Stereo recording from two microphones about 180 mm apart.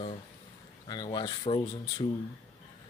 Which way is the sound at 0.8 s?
25° left (ahead or behind).